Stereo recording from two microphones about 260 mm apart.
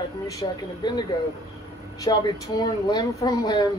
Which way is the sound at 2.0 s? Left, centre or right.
Centre.